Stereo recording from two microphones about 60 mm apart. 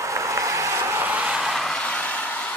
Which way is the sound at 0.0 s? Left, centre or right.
Right.